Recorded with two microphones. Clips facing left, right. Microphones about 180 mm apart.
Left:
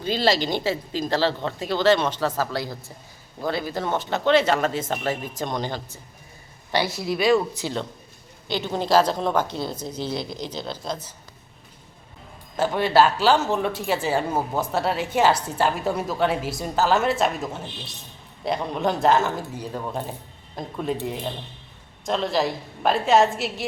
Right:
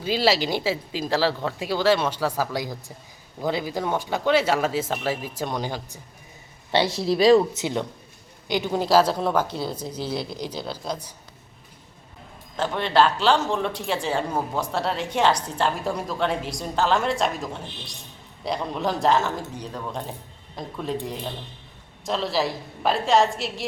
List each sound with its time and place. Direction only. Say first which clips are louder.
0.0 s speech: even; 5° right (ahead or behind)
6.7 s speech: right 3 dB; 25° right (ahead or behind)
7.6 s speech: right 2 dB; 15° right (ahead or behind)
12.5 s a man's voice: left 2 dB; 5° left (ahead or behind)